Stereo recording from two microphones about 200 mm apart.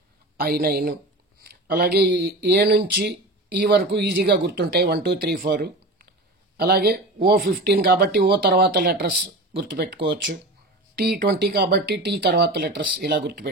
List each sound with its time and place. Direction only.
0.4 s speech: 45° right (ahead or behind)